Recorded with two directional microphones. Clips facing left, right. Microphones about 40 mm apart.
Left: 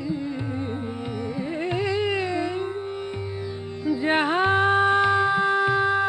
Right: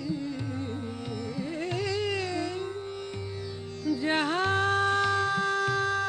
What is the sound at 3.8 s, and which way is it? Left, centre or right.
Music, left.